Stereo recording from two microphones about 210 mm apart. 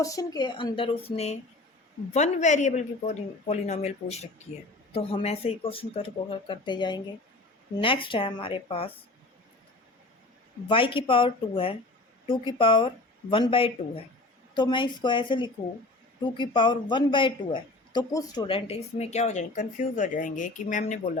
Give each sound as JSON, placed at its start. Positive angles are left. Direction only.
{"t": 0.0, "sound": "speech", "side_deg": 15}
{"t": 10.7, "sound": "speech", "side_deg": 25}